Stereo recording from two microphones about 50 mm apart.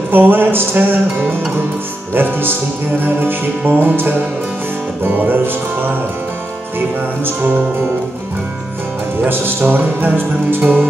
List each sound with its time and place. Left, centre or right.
0.1 s music: right
2.1 s music: right
7.2 s music: right
9.3 s music: right